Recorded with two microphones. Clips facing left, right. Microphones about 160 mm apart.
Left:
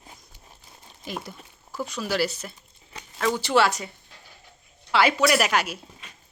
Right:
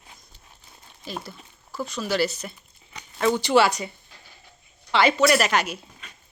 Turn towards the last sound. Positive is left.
turn(degrees=5)  # may be behind; listen again after turning